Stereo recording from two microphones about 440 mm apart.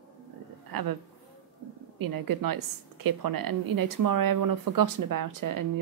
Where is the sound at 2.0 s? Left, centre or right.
Right.